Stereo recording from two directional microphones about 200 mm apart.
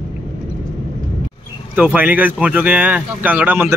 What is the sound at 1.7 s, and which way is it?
Speech, 10° right (ahead or behind).